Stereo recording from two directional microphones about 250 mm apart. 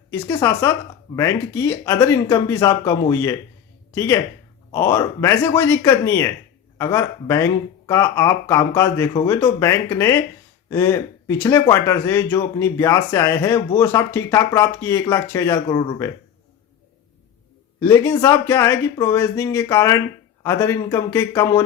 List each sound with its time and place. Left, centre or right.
0.1 s speech: centre
15.6 s speech: left
17.7 s speech: centre